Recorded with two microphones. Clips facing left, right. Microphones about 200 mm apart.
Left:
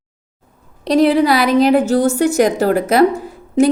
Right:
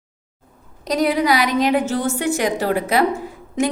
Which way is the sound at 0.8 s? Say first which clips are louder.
Left 6 dB; 30° left (ahead or behind).